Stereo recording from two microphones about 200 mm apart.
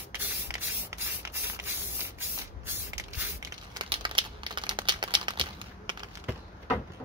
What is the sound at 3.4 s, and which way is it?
Crumpling, 20° right (ahead or behind).